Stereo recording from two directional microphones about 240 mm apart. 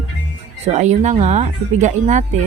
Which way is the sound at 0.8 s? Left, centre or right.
Right.